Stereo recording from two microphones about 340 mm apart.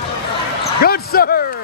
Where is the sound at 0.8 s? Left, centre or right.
Left.